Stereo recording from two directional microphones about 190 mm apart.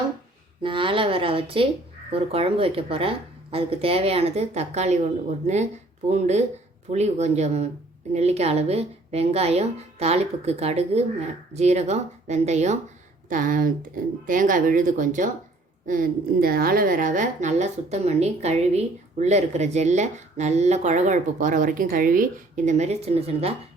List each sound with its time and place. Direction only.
0.6 s a woman's voice: 25° right (ahead or behind)
6.1 s a woman's voice: 35° right (ahead or behind)